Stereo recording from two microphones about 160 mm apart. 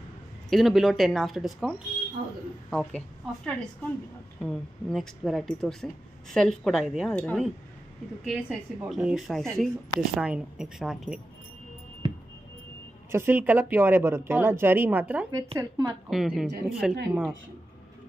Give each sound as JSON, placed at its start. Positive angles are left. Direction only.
{"t": 0.5, "sound": "a woman's voice", "side_deg": 0}
{"t": 4.4, "sound": "a woman's voice", "side_deg": 5}
{"t": 8.2, "sound": "a woman's voice", "side_deg": -5}
{"t": 13.1, "sound": "a woman's voice", "side_deg": -15}
{"t": 15.3, "sound": "a woman's voice", "side_deg": -20}
{"t": 16.1, "sound": "a woman's voice", "side_deg": 0}